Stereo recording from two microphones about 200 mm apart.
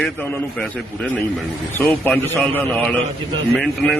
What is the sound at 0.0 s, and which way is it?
Speech, 5° left (ahead or behind).